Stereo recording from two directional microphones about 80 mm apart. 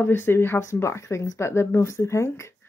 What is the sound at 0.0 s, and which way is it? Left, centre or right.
Speech, left.